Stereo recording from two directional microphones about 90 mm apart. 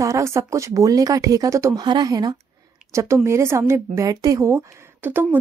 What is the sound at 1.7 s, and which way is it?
Speech, 50° right (ahead or behind).